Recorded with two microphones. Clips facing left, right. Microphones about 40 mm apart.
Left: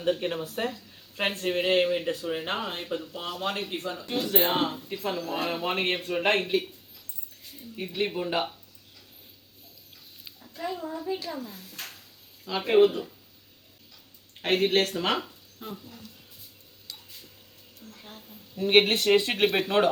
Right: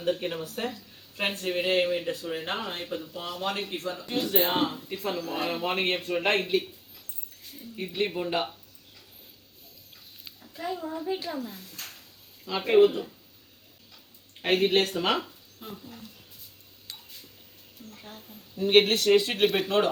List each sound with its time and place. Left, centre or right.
0.0 s speech: centre
3.3 s speech: centre
7.8 s speech: centre
10.2 s a child's voice: centre
11.1 s a child's voice: centre
11.3 s speech: centre
14.4 s speech: centre
18.0 s a sound: centre
18.7 s speech: centre